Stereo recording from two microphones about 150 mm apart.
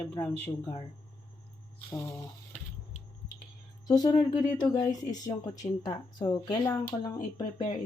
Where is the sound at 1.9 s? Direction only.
20° left (ahead or behind).